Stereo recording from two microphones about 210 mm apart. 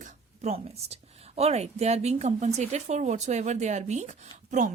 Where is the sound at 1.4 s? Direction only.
30° right (ahead or behind).